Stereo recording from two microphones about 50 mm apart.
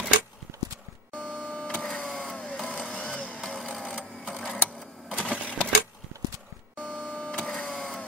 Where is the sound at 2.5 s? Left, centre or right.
Centre; by 3.4 s left.